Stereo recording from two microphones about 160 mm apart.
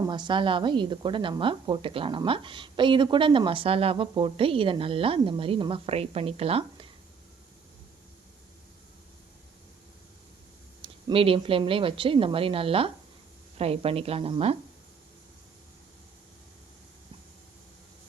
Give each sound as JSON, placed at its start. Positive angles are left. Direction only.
{"t": 0.1, "sound": "a woman's voice", "side_deg": -30}
{"t": 10.8, "sound": "a woman's voice", "side_deg": -35}